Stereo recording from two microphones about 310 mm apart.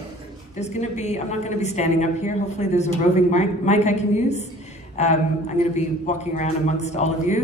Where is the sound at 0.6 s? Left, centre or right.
Left.